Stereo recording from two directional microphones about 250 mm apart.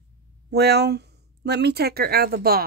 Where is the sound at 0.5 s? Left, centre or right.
Right.